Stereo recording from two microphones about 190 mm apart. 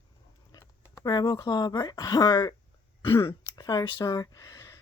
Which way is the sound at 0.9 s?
20° left (ahead or behind).